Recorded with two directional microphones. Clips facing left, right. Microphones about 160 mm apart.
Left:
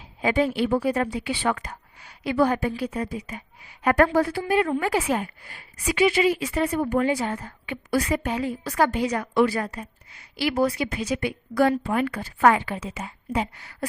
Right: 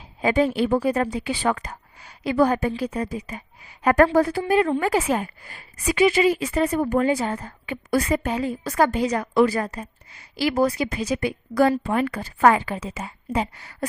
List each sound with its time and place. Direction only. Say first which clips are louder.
0.2 s a woman's voice: right 2 dB; 40° right (ahead or behind)